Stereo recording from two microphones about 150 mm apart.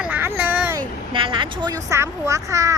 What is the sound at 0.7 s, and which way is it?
Speech, 35° right (ahead or behind).